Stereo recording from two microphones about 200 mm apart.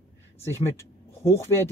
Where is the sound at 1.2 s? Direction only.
15° left (ahead or behind).